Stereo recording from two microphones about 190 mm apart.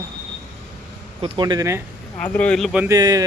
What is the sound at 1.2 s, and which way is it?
Speech, 25° right (ahead or behind).